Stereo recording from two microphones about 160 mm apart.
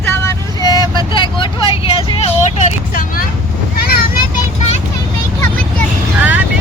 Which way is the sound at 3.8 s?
70° left (ahead or behind).